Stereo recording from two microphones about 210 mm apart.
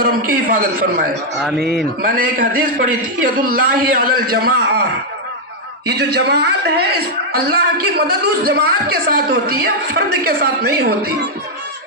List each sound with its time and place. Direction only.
0.0 s a man's voice: 40° right (ahead or behind)
5.9 s speech: 50° right (ahead or behind)